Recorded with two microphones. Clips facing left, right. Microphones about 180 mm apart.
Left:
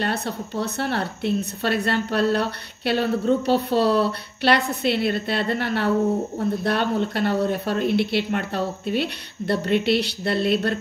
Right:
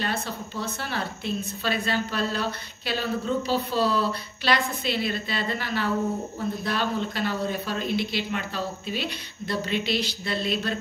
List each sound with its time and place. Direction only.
0.0 s a woman's voice: 65° left (ahead or behind)